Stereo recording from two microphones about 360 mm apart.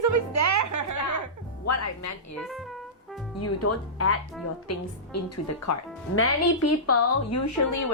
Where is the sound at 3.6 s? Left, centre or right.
Left.